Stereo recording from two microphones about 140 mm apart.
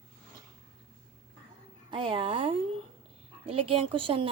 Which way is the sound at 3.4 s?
40° right (ahead or behind).